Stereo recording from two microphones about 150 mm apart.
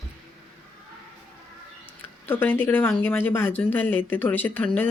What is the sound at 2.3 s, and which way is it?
Speech, 15° left (ahead or behind).